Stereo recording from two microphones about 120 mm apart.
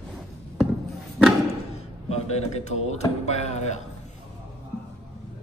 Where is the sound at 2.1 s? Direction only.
65° left (ahead or behind).